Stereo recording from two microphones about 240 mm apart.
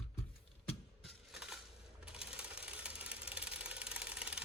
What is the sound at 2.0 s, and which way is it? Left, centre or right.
Sewing machine, centre.